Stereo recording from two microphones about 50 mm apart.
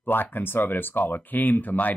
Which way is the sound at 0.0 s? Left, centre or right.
Left.